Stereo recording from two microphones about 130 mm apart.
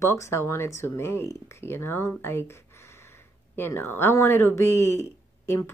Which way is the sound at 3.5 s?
20° left (ahead or behind).